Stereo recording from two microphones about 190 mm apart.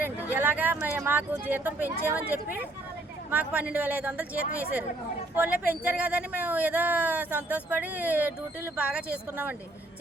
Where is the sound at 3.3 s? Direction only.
5° right (ahead or behind).